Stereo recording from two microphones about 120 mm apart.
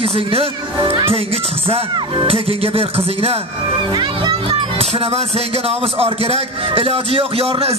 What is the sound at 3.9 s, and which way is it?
Speech, 35° right (ahead or behind).